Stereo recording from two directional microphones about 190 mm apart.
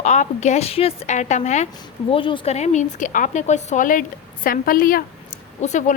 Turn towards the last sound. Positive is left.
turn(degrees=40)  # may be behind; listen again after turning